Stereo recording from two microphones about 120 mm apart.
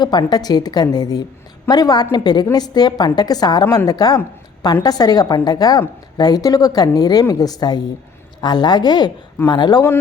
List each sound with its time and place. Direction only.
0.0 s a woman's voice: 35° left (ahead or behind)